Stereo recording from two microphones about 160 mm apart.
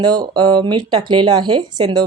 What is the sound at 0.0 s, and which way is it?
A woman's voice, 25° right (ahead or behind).